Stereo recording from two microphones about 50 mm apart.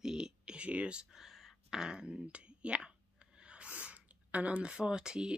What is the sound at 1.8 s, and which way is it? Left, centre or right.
Speech, centre.